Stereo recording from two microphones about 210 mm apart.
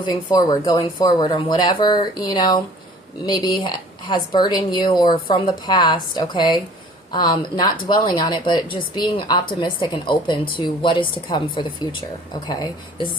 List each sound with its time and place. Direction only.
0.0 s a woman's voice: 20° left (ahead or behind)